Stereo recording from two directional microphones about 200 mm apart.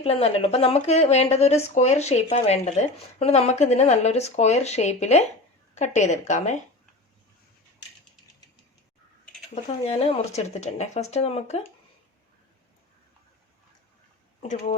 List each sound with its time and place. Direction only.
0.0 s speech: 30° left (ahead or behind)
9.8 s speech: 30° left (ahead or behind)
14.4 s speech: 35° left (ahead or behind)